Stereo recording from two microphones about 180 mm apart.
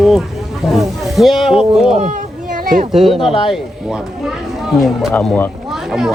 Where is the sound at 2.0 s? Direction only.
45° right (ahead or behind).